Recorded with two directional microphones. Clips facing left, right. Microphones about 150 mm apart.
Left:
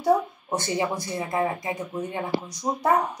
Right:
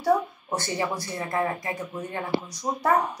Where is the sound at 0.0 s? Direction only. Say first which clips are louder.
Left 1 dB; 15° left (ahead or behind).